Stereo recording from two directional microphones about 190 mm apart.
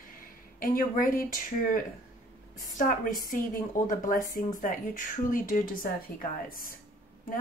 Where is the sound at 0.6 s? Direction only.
45° left (ahead or behind).